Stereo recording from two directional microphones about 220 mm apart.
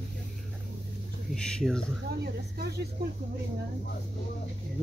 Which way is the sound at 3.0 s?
45° right (ahead or behind).